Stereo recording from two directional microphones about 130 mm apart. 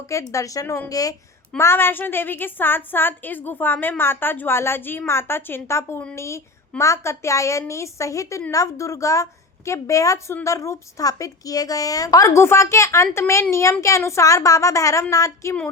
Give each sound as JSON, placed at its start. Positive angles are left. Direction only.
{"t": 0.1, "sound": "a woman's voice", "side_deg": 25}